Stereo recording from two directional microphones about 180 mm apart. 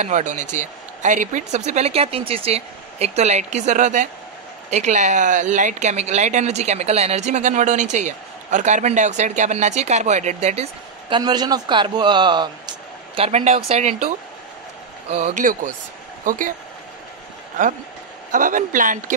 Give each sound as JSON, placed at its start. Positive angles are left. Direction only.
{"t": 0.0, "sound": "speech", "side_deg": -40}
{"t": 15.0, "sound": "speech", "side_deg": -40}
{"t": 18.3, "sound": "speech", "side_deg": -45}